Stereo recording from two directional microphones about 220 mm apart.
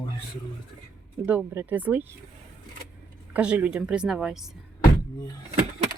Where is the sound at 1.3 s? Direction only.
10° right (ahead or behind).